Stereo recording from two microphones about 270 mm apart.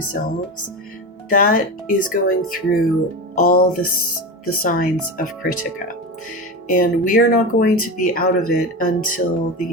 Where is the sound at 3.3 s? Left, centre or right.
Left.